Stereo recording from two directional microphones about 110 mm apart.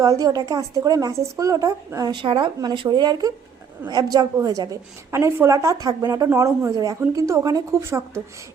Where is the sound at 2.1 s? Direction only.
50° right (ahead or behind).